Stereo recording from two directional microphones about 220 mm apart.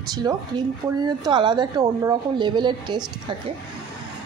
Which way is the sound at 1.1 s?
20° right (ahead or behind).